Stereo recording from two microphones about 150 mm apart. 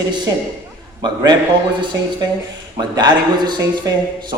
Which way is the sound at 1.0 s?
30° right (ahead or behind).